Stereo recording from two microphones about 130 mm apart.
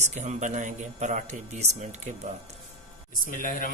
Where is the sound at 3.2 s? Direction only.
90° left.